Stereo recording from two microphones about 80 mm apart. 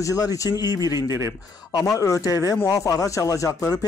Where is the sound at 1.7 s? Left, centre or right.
Left.